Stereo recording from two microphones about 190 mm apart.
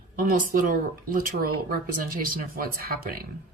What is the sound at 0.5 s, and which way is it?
Speech, 45° right (ahead or behind).